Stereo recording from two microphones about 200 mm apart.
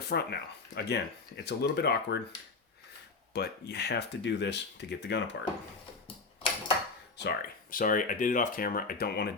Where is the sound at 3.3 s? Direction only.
55° left (ahead or behind).